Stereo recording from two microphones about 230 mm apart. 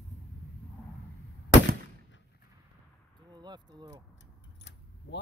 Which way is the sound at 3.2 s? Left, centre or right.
Centre.